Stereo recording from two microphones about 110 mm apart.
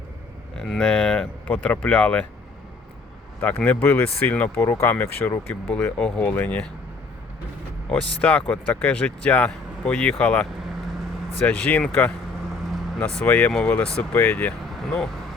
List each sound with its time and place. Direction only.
0.5 s speech: centre (ahead or behind)
3.4 s speech: 15° left (ahead or behind)
4.6 s speech: 25° left (ahead or behind)
5.7 s speech: 10° left (ahead or behind)
7.9 s speech: 10° left (ahead or behind)
11.4 s speech: 10° left (ahead or behind)
13.0 s speech: 5° left (ahead or behind)